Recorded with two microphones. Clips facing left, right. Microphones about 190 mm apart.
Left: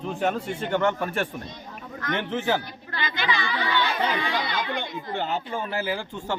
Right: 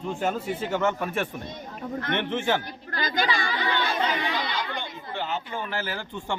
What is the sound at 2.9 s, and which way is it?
Speech, 40° right (ahead or behind).